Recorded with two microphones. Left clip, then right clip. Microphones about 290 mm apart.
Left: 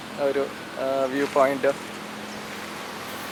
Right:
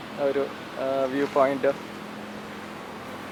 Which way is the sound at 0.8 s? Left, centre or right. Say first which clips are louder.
Left 1 dB; right.